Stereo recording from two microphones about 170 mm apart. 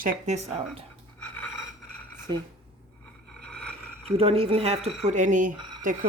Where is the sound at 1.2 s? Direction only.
5° left (ahead or behind).